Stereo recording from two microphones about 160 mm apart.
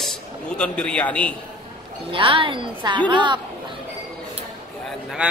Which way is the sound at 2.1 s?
35° right (ahead or behind).